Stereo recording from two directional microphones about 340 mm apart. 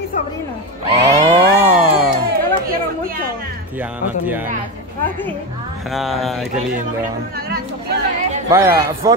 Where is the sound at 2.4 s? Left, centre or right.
Right.